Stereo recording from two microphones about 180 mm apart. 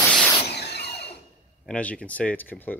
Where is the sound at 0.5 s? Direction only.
65° left (ahead or behind).